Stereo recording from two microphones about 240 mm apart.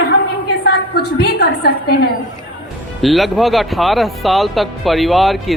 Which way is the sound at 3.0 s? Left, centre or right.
Centre.